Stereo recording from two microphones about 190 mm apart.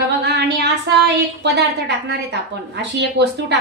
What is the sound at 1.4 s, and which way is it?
A woman's voice, 65° right (ahead or behind).